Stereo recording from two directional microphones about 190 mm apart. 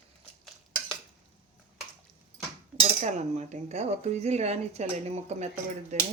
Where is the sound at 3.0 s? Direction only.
35° right (ahead or behind).